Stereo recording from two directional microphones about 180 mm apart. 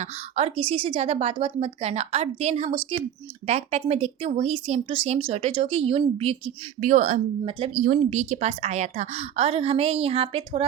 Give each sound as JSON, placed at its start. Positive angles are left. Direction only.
{"t": 0.0, "sound": "a woman's voice", "side_deg": -35}
{"t": 6.7, "sound": "a woman's voice", "side_deg": -45}